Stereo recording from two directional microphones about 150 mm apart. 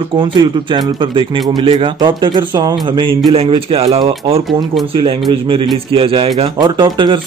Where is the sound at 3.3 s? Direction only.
40° right (ahead or behind).